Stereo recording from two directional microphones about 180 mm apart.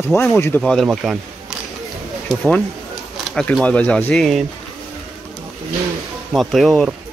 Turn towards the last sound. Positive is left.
turn(degrees=0)  # may be behind; listen again after turning